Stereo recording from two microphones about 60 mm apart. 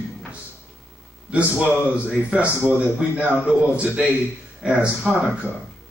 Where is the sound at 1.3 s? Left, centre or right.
Right.